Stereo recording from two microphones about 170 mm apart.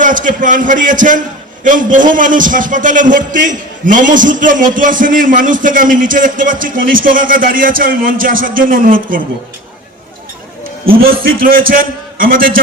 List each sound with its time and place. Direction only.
0.0 s a man's voice: 50° right (ahead or behind)
11.2 s a man's voice: 60° right (ahead or behind)